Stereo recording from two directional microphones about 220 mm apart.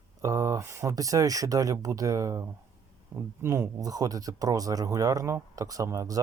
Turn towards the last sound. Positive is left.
turn(degrees=-15)  # may be behind; listen again after turning